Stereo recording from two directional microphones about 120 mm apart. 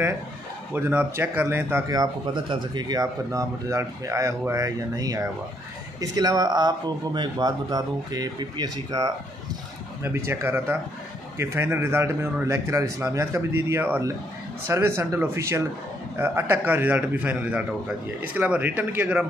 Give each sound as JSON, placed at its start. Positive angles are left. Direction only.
{"t": 0.7, "sound": "a man's voice", "side_deg": -20}
{"t": 1.9, "sound": "speech", "side_deg": -40}
{"t": 10.0, "sound": "a man's voice", "side_deg": -20}